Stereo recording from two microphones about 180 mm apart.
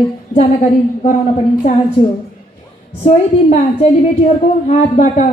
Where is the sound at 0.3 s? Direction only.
35° left (ahead or behind).